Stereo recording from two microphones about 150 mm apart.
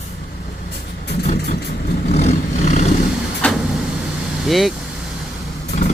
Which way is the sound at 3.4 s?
10° left (ahead or behind).